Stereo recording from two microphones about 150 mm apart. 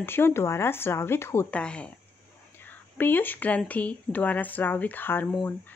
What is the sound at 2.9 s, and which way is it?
Speech, 15° left (ahead or behind).